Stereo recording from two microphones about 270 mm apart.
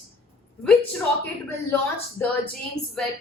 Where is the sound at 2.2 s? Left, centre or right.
Centre.